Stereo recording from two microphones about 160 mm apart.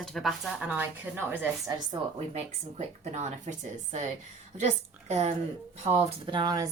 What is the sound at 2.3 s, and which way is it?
A woman's voice, 45° right (ahead or behind).